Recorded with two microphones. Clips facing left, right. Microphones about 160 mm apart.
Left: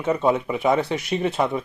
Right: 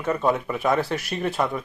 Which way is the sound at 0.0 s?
20° left (ahead or behind).